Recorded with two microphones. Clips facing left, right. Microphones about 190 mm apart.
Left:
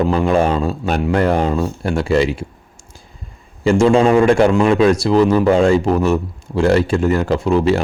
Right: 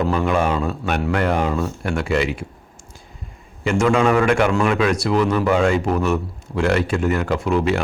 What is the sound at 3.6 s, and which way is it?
A man's voice, 30° left (ahead or behind).